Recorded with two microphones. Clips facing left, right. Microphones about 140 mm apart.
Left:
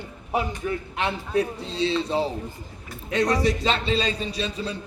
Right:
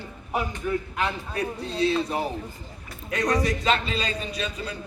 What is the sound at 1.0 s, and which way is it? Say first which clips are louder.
A man's voice: left 4 dB; 25° left (ahead or behind).